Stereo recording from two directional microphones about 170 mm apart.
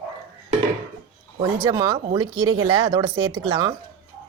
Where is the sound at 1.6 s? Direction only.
20° right (ahead or behind).